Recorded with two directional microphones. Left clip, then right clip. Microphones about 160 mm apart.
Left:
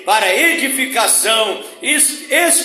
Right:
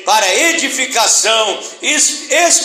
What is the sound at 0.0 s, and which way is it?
Speech, 25° left (ahead or behind).